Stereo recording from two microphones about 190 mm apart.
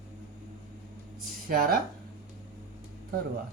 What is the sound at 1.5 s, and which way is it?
Speech, 50° right (ahead or behind).